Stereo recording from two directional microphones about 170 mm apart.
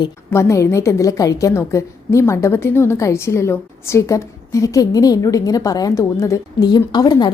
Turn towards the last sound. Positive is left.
turn(degrees=25)  # may be behind; listen again after turning